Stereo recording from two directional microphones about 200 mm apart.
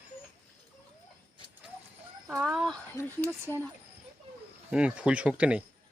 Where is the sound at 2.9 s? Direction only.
10° left (ahead or behind).